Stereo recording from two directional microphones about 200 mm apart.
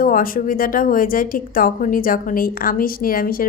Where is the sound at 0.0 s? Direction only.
45° left (ahead or behind).